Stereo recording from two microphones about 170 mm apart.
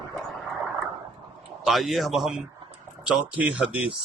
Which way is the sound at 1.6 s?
Centre (ahead or behind).